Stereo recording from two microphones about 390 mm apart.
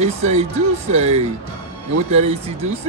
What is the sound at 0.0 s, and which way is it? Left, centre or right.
Speech, centre.